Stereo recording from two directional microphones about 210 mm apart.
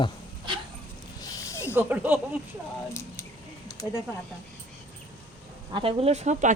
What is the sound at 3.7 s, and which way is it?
Speech, 15° left (ahead or behind).